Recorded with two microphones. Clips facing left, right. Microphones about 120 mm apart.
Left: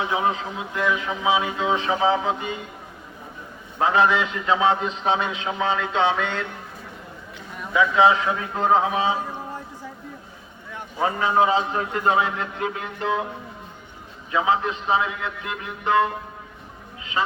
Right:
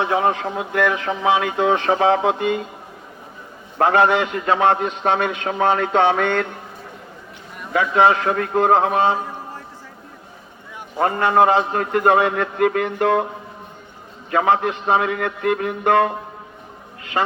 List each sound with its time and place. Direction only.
0.0 s a man's voice: 60° right (ahead or behind)
3.8 s a man's voice: 60° right (ahead or behind)
7.7 s a man's voice: 55° right (ahead or behind)
10.9 s a man's voice: 60° right (ahead or behind)
14.3 s a man's voice: 60° right (ahead or behind)